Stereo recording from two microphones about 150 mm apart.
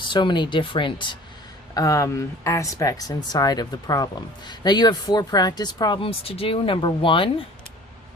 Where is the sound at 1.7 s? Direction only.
25° left (ahead or behind).